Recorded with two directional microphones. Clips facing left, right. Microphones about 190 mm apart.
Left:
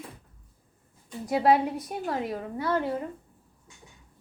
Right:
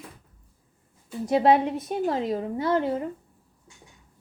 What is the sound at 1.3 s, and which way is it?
A woman's voice, 20° right (ahead or behind).